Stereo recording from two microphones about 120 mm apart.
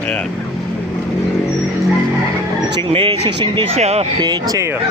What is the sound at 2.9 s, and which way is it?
Speech, 40° right (ahead or behind).